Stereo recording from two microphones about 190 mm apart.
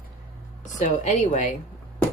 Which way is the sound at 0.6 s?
40° left (ahead or behind).